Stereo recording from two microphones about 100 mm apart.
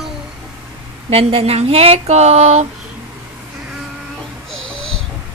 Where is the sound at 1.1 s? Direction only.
75° right (ahead or behind).